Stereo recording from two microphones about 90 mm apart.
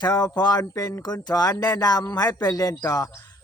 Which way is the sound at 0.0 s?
45° left (ahead or behind).